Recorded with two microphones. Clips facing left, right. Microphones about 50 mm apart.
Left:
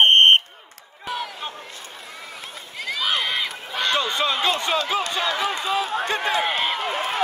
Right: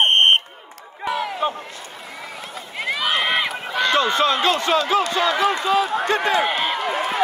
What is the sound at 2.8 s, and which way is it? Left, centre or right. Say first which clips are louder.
Run: right 3 dB; right.